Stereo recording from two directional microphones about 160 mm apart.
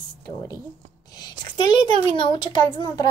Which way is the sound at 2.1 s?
30° left (ahead or behind).